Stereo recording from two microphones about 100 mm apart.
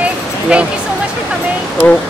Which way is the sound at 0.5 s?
10° right (ahead or behind).